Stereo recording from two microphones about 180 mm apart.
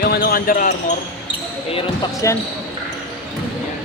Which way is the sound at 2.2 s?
15° left (ahead or behind).